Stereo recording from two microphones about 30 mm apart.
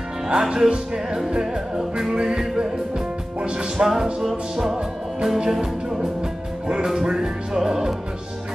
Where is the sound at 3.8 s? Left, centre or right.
Right.